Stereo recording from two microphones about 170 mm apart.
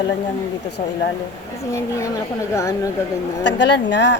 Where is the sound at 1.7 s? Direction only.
20° left (ahead or behind).